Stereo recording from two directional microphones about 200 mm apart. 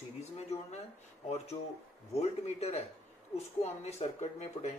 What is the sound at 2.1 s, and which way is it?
Speech, 30° left (ahead or behind).